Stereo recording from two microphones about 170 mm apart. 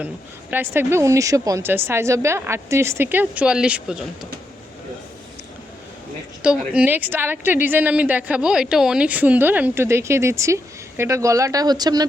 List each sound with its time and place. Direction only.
0.5 s a woman's voice: 10° right (ahead or behind)
6.4 s a woman's voice: 5° right (ahead or behind); by 12.0 s 25° right (ahead or behind)